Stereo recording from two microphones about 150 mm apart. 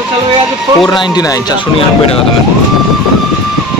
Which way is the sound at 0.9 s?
30° left (ahead or behind).